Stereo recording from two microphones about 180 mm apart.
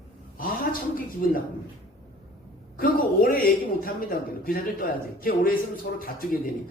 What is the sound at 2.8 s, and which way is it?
A man's voice, 50° left (ahead or behind).